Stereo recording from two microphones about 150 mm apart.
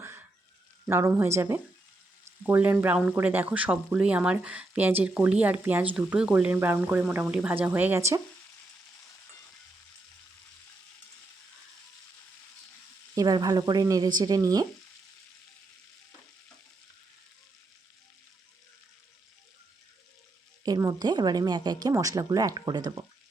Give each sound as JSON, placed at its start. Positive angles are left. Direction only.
{"t": 0.9, "sound": "speech", "side_deg": -15}
{"t": 2.2, "sound": "frying", "side_deg": -15}
{"t": 3.1, "sound": "speech", "side_deg": -10}
{"t": 13.1, "sound": "speech", "side_deg": -25}
{"t": 20.7, "sound": "speech", "side_deg": -25}